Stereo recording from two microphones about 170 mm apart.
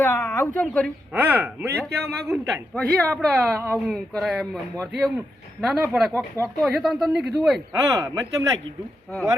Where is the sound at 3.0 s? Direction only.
5° left (ahead or behind).